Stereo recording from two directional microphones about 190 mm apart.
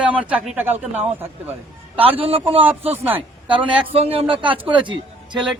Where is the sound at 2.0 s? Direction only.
30° right (ahead or behind).